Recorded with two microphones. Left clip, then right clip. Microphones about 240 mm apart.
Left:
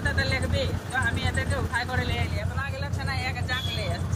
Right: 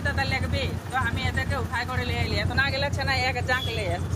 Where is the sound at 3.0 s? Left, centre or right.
Right.